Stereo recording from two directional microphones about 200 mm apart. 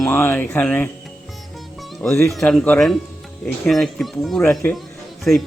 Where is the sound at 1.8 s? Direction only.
Centre (ahead or behind).